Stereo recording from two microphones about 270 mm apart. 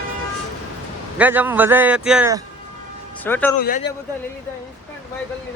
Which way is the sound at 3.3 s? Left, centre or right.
Centre.